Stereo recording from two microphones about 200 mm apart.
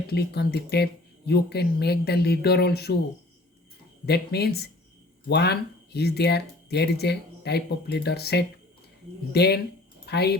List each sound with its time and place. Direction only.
0.1 s speech: 55° left (ahead or behind)
4.0 s speech: 55° left (ahead or behind)